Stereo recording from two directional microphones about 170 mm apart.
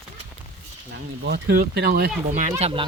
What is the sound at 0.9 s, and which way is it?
Speech, 80° right.